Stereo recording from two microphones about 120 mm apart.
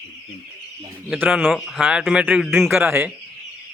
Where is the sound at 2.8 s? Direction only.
20° right (ahead or behind).